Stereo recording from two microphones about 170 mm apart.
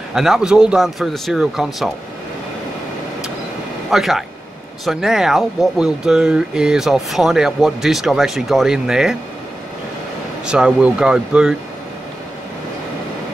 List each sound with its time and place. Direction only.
0.1 s speech: centre (ahead or behind)
3.9 s speech: centre (ahead or behind)
10.5 s speech: 5° right (ahead or behind)